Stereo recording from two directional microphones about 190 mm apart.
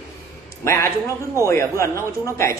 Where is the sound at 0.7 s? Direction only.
15° left (ahead or behind).